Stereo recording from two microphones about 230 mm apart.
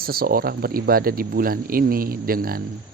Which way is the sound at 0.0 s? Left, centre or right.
Right.